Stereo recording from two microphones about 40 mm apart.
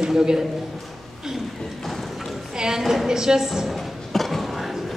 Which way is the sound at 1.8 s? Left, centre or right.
Centre.